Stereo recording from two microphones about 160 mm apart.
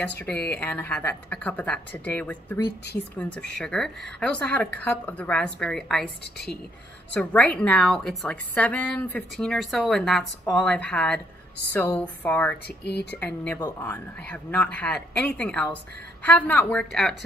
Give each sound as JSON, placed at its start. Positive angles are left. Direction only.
{"t": 0.0, "sound": "a woman's voice", "side_deg": 10}
{"t": 7.2, "sound": "a woman's voice", "side_deg": 5}
{"t": 12.6, "sound": "speech", "side_deg": 90}
{"t": 13.2, "sound": "a woman's voice", "side_deg": 10}